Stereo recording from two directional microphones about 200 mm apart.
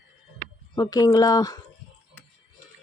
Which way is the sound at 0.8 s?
20° left (ahead or behind).